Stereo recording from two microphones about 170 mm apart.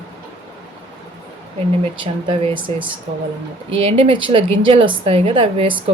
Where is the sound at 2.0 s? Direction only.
30° right (ahead or behind).